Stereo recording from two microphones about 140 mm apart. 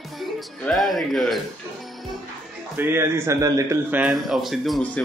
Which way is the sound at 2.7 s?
15° right (ahead or behind).